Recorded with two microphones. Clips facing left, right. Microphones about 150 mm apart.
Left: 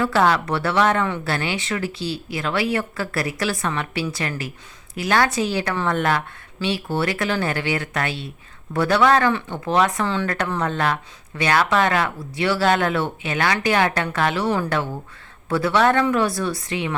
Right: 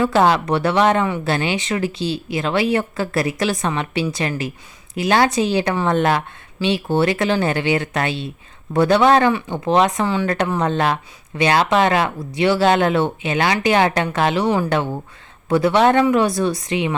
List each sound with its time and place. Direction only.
0.0 s speech: 20° right (ahead or behind)